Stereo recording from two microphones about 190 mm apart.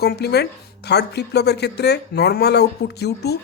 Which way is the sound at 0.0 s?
55° left (ahead or behind).